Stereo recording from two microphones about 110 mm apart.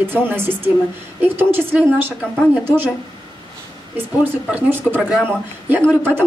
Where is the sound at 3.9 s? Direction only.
15° right (ahead or behind).